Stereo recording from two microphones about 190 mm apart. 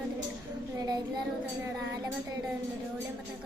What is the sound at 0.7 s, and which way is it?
Speech, 20° right (ahead or behind).